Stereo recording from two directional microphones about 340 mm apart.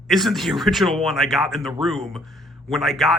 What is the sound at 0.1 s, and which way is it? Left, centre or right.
Speech, centre.